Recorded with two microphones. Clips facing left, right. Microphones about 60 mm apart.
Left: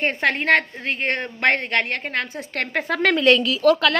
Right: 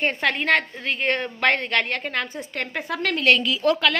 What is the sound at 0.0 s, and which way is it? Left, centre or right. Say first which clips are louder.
A woman's voice: left 2 dB; left.